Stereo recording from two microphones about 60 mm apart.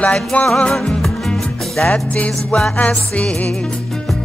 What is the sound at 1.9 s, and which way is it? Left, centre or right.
Music, left.